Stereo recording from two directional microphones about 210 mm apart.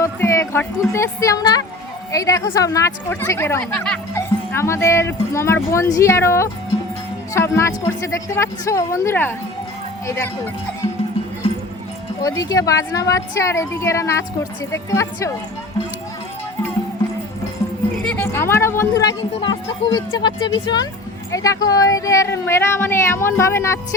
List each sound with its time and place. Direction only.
0.0 s music: 15° left (ahead or behind)
0.9 s a woman's voice: 15° left (ahead or behind)
12.2 s a woman's voice: 15° left (ahead or behind)
18.0 s a woman's voice: 10° left (ahead or behind)